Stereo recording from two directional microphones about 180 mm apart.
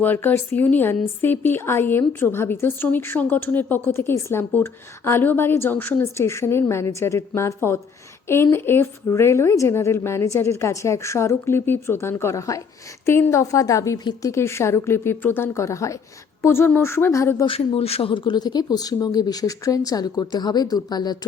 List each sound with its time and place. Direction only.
0.0 s a woman's voice: 10° left (ahead or behind)
17.4 s speech: 30° left (ahead or behind)